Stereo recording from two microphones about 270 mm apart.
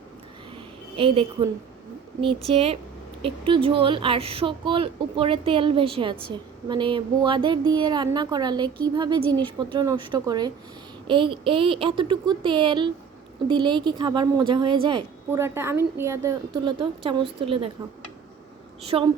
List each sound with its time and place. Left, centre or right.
0.9 s speech: centre
18.8 s speech: right